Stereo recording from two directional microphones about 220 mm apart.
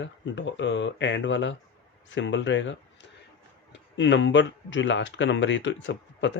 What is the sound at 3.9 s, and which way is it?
Speech, 55° left (ahead or behind).